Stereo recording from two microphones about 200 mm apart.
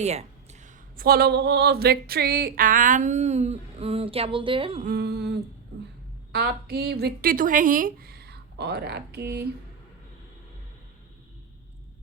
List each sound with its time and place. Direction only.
0.0 s a man's voice: 35° right (ahead or behind)
4.8 s a sound: 50° right (ahead or behind)
6.3 s speech: 50° right (ahead or behind)